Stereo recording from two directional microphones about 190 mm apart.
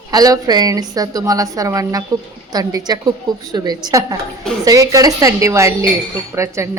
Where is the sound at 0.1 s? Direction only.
20° right (ahead or behind).